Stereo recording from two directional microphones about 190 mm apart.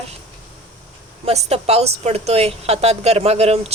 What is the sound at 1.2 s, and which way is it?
Speech, 35° right (ahead or behind).